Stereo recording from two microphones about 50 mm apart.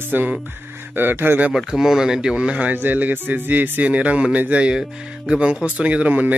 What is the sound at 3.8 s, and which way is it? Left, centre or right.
Speech, right.